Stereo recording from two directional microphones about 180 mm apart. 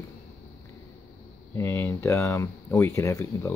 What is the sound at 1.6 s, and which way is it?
Speech, 15° left (ahead or behind).